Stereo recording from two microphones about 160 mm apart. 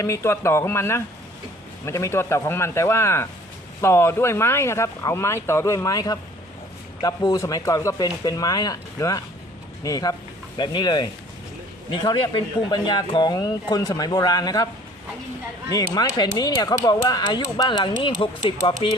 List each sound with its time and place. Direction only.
0.0 s speech: 15° left (ahead or behind)
15.7 s speech: 25° left (ahead or behind)